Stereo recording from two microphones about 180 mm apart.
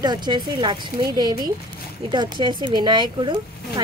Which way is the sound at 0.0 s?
25° right (ahead or behind).